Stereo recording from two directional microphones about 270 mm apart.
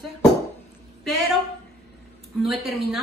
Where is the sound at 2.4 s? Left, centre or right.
Centre.